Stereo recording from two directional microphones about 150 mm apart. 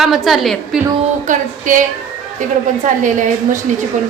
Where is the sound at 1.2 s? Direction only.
60° right (ahead or behind).